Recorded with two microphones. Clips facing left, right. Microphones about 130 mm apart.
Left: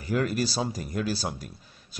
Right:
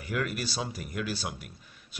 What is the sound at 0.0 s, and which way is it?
Speech, 35° left (ahead or behind).